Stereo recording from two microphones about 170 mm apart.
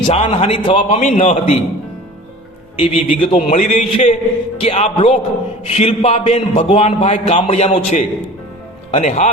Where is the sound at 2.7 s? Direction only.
30° left (ahead or behind).